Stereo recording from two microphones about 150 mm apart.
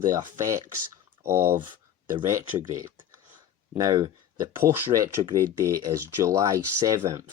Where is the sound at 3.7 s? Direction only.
25° right (ahead or behind).